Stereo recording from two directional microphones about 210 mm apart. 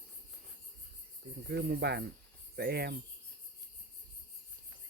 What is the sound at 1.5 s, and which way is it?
Cricket, 50° right (ahead or behind).